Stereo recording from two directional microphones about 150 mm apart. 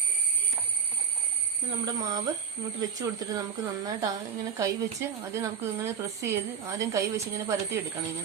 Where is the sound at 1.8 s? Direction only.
25° right (ahead or behind).